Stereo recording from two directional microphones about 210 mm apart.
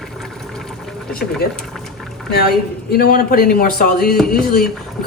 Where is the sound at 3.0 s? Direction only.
45° left (ahead or behind).